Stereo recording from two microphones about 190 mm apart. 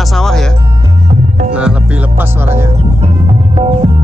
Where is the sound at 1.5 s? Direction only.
5° right (ahead or behind).